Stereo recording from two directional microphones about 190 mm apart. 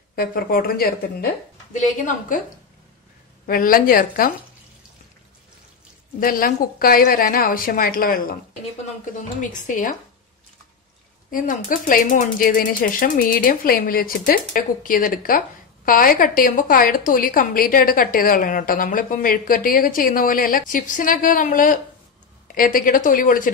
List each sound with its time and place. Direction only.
0.1 s speech: 50° left (ahead or behind)
1.7 s speech: 40° left (ahead or behind)
3.4 s speech: 50° left (ahead or behind)
6.1 s speech: 45° left (ahead or behind)
11.2 s speech: 45° left (ahead or behind)